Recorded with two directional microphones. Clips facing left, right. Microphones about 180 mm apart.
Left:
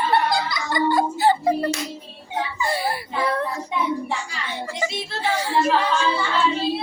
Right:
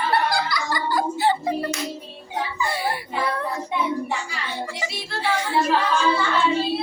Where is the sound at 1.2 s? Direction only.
40° left (ahead or behind).